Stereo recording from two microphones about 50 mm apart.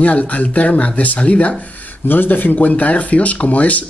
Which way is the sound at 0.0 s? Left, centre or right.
Left.